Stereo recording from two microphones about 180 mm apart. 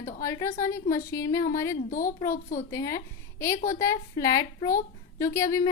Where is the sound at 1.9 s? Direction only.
45° left (ahead or behind).